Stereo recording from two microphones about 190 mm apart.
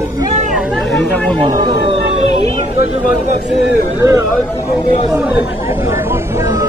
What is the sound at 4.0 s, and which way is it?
Speech, 15° right (ahead or behind).